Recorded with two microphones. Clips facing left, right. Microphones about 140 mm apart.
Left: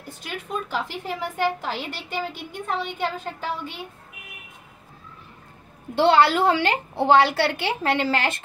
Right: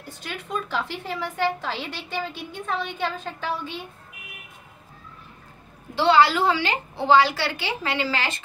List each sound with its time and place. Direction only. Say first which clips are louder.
0.5 s a woman's voice: even; 10° left (ahead or behind)
5.9 s a woman's voice: left 1 dB; 55° left (ahead or behind)